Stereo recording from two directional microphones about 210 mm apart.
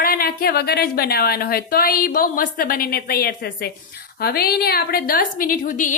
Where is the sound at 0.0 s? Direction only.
45° left (ahead or behind).